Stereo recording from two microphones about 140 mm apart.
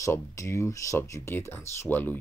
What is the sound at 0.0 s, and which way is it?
Speech, 20° left (ahead or behind).